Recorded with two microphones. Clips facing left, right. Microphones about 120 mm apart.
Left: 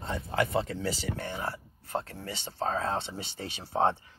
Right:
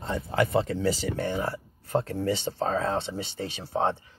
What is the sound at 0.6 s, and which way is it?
Speech, 70° right (ahead or behind).